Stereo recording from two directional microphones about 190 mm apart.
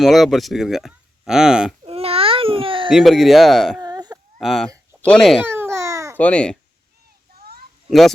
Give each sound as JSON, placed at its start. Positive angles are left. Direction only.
{"t": 0.0, "sound": "speech", "side_deg": 0}
{"t": 1.8, "sound": "baby cry", "side_deg": -30}
{"t": 2.9, "sound": "speech", "side_deg": 0}
{"t": 3.8, "sound": "baby cry", "side_deg": -20}
{"t": 4.4, "sound": "speech", "side_deg": 0}
{"t": 5.5, "sound": "babbling", "side_deg": -15}
{"t": 6.1, "sound": "speech", "side_deg": 5}
{"t": 7.9, "sound": "speech", "side_deg": 0}